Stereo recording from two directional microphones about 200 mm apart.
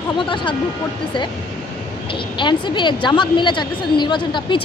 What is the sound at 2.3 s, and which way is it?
Speech, 25° left (ahead or behind).